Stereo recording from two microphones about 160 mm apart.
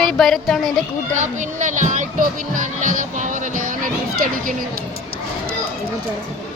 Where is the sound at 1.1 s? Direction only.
50° right (ahead or behind).